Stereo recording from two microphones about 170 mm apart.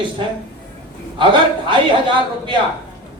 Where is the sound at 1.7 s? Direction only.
30° right (ahead or behind).